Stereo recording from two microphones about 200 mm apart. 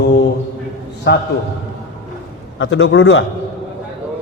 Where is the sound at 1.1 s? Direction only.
60° left (ahead or behind).